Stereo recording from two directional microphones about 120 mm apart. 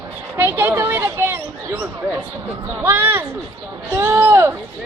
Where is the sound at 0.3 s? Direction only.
15° right (ahead or behind).